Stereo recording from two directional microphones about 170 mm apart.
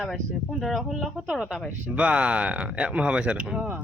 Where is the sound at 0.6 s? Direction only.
Centre (ahead or behind).